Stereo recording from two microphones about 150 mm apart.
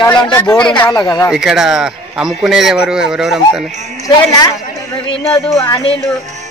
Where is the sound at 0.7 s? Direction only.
10° left (ahead or behind).